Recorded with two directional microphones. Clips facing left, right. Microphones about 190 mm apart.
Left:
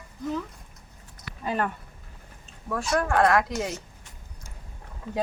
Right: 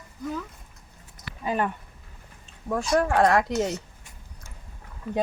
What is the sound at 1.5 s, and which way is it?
Speech, 15° right (ahead or behind).